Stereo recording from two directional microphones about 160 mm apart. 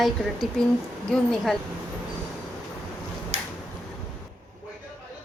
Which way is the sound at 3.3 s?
45° right (ahead or behind).